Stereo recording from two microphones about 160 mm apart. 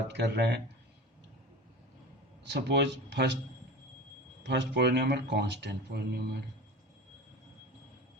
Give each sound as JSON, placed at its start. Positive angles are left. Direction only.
{"t": 0.1, "sound": "speech", "side_deg": -90}
{"t": 2.5, "sound": "speech", "side_deg": -90}
{"t": 4.4, "sound": "speech", "side_deg": -90}